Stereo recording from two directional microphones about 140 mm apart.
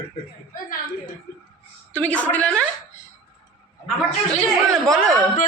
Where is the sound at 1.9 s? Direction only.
10° left (ahead or behind).